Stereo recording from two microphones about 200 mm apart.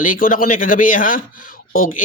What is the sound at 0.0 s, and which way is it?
Speech, 45° left (ahead or behind).